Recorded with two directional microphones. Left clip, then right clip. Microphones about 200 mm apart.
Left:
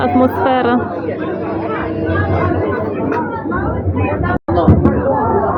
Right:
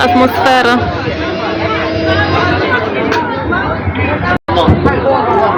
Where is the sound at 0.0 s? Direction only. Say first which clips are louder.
Right 4 dB; 10° right (ahead or behind).